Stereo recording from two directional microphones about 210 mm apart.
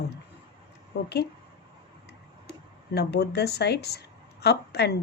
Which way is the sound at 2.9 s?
50° left (ahead or behind).